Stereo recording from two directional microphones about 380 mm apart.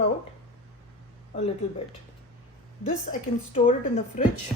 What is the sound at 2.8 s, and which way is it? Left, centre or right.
Speech, left.